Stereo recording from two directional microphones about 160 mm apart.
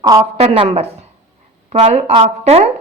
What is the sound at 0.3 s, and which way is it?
A woman's voice, 40° right (ahead or behind).